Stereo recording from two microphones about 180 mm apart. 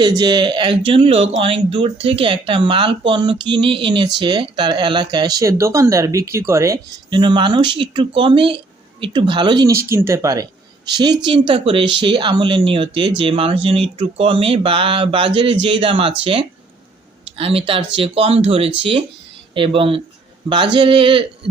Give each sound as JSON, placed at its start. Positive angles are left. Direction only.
{"t": 0.2, "sound": "speech", "side_deg": -25}